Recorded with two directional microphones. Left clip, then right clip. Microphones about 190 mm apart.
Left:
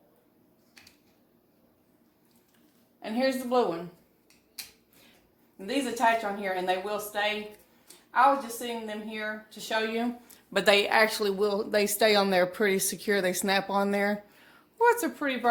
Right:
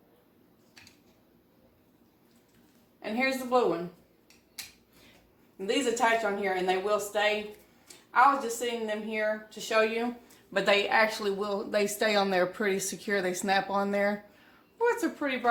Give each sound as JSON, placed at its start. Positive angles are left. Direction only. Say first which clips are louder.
{"t": 3.0, "sound": "speech", "louder": "left 1 dB", "side_deg": 35}
{"t": 4.6, "sound": "finger snapping", "louder": "even", "side_deg": 0}
{"t": 5.5, "sound": "a woman's voice", "louder": "right 2 dB", "side_deg": 25}
{"t": 10.5, "sound": "speech", "louder": "left 2 dB", "side_deg": 55}
{"t": 14.8, "sound": "a woman's voice", "louder": "left 4 dB", "side_deg": 55}